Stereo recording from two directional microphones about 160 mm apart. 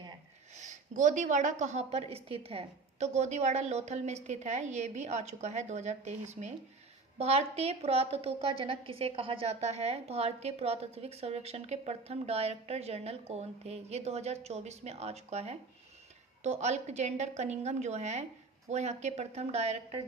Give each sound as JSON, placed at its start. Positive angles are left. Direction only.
{"t": 0.5, "sound": "a woman's voice", "side_deg": -50}